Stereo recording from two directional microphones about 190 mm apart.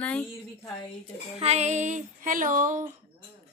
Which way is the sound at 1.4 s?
35° right (ahead or behind).